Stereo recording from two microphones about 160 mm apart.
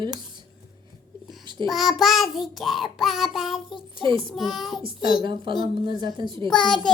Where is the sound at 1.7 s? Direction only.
Centre (ahead or behind).